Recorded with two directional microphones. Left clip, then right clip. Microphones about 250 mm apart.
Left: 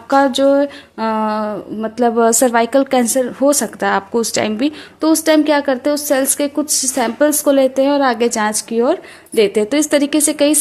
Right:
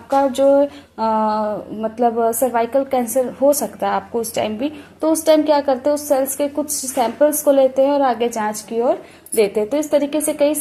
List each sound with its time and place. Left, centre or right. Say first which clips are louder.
0.1 s a woman's voice: left 2 dB; left